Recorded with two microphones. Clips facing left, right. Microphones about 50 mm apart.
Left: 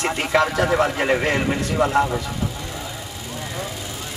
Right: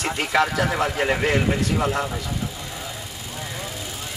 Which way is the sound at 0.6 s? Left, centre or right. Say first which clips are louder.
Left 3 dB; centre.